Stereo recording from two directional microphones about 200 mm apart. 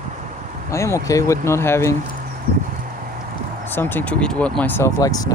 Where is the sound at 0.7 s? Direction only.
15° left (ahead or behind).